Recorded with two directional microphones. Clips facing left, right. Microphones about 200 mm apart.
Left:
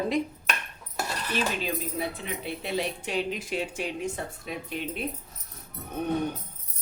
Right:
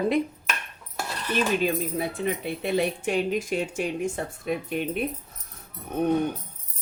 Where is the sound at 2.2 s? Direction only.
50° right (ahead or behind).